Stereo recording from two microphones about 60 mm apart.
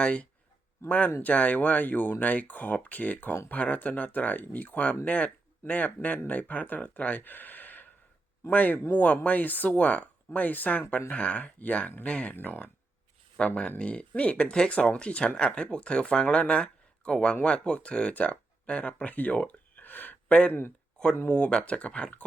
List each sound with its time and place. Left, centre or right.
0.0 s speech: left
20.5 s speech: left
21.2 s speech: left